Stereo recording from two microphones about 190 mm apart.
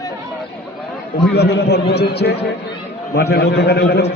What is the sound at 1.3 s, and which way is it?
A man's voice, 60° left (ahead or behind).